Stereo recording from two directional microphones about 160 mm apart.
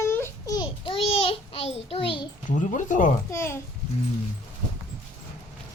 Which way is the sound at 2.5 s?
50° left (ahead or behind).